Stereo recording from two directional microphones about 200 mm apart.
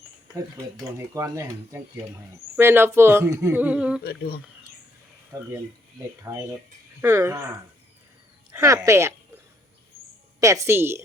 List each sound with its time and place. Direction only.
0.9 s speech: 15° right (ahead or behind)
4.0 s speech: 50° left (ahead or behind)
6.3 s speech: 15° right (ahead or behind)
8.5 s speech: 15° right (ahead or behind)
10.4 s speech: 15° right (ahead or behind)